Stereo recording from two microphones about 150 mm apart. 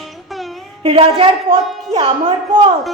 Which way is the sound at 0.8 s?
40° right (ahead or behind).